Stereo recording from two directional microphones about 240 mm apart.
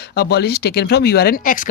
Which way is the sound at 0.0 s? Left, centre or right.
Left.